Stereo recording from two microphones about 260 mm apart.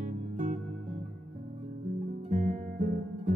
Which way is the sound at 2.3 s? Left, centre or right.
Right.